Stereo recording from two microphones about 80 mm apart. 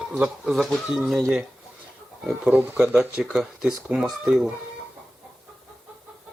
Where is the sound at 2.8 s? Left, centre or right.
Centre.